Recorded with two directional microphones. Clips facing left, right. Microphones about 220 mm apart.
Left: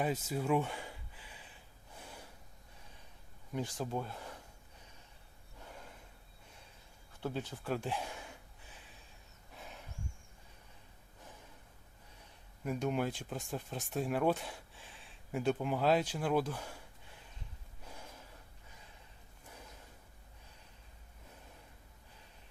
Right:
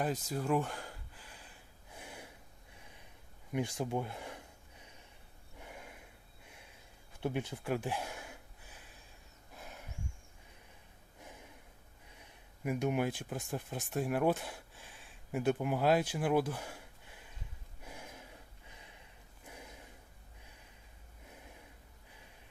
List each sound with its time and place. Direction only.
0.0 s a sound: 5° left (ahead or behind)
2.0 s gasp: 15° right (ahead or behind)
3.5 s speech: 15° right (ahead or behind)
5.5 s snort: 15° right (ahead or behind)
7.2 s gasp: 20° right (ahead or behind)
9.6 s a sound: 5° right (ahead or behind)
11.2 s snort: 15° right (ahead or behind)
12.2 s speech: 10° right (ahead or behind)
17.8 s gasp: 10° right (ahead or behind)
19.5 s snort: 15° right (ahead or behind)